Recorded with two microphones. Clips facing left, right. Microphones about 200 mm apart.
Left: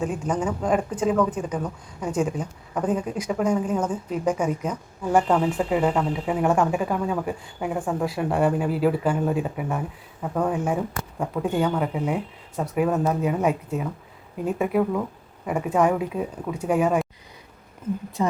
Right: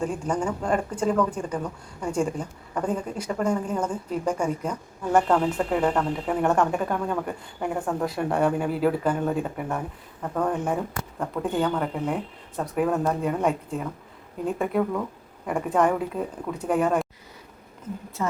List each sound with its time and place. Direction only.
0.3 s speech: 5° left (ahead or behind)
18.2 s a woman's voice: 20° left (ahead or behind)